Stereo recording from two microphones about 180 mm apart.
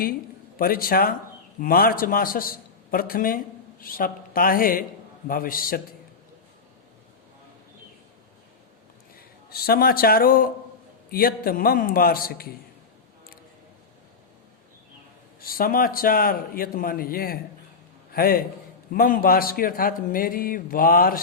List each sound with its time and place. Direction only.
0.6 s a man's voice: 55° left (ahead or behind)
9.1 s a man's voice: 60° left (ahead or behind)
15.4 s a man's voice: 55° left (ahead or behind)